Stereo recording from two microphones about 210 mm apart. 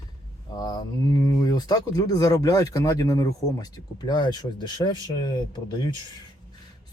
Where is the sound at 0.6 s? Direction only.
20° left (ahead or behind).